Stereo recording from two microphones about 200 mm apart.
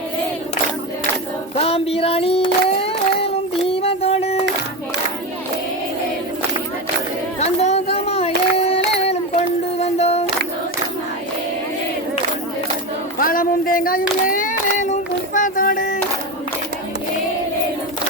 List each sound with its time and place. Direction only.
1.5 s child singing: 30° left (ahead or behind)
7.3 s a sound: 35° left (ahead or behind)
13.1 s child singing: 45° left (ahead or behind)